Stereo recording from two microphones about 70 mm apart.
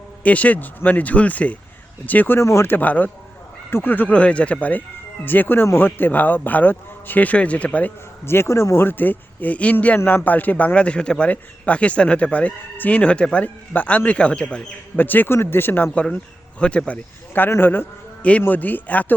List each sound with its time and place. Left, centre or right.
0.2 s a man's voice: left
2.4 s speech: left
2.6 s a man's voice: left
8.2 s a man's voice: left; by 14.6 s centre
14.9 s a man's voice: left
16.0 s speech: centre
17.5 s speech: left
18.2 s a man's voice: centre